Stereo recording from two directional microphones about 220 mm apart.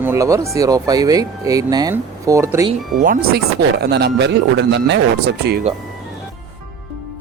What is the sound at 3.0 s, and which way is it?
Speech, 40° right (ahead or behind).